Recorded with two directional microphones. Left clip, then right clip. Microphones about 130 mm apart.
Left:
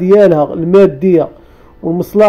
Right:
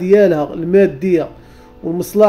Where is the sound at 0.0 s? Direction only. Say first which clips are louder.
Left 4 dB; 30° left (ahead or behind).